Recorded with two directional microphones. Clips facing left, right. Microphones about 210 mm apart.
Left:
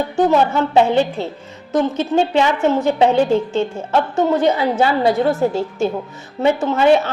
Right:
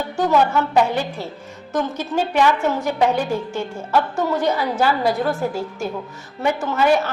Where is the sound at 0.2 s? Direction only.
25° left (ahead or behind).